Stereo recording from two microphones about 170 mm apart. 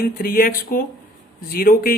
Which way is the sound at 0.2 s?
60° left (ahead or behind).